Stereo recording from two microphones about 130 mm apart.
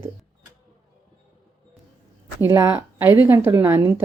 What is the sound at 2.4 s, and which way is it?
A woman's voice, 20° right (ahead or behind).